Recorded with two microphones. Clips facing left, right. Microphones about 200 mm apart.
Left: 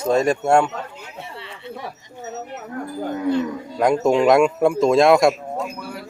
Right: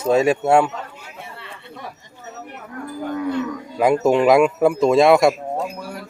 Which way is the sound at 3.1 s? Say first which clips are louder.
Left 3 dB; 30° left (ahead or behind).